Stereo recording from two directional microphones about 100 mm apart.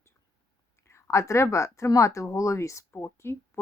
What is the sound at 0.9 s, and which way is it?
A woman's voice, 30° left (ahead or behind).